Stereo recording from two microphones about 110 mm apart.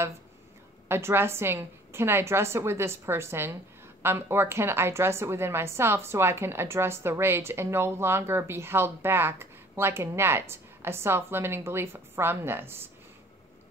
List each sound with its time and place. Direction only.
0.8 s a woman's voice: 20° right (ahead or behind)